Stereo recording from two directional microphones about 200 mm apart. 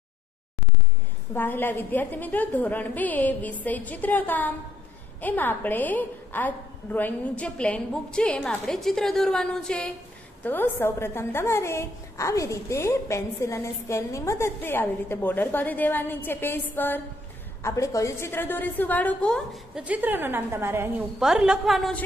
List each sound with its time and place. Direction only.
1.3 s a woman's voice: 10° left (ahead or behind)